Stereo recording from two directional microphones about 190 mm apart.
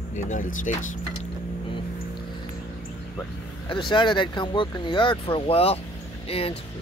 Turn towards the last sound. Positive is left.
turn(degrees=30)  # may be behind; listen again after turning